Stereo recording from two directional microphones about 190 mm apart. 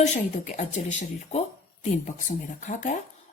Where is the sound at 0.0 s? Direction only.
40° left (ahead or behind).